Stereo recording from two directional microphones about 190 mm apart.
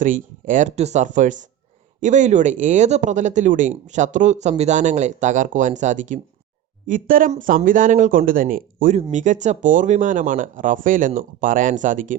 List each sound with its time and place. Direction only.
0.0 s speech: 45° right (ahead or behind)